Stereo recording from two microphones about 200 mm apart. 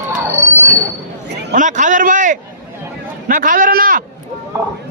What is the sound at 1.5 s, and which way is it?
A man's voice, 40° right (ahead or behind).